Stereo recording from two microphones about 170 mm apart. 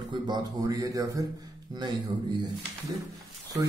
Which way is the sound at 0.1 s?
25° right (ahead or behind).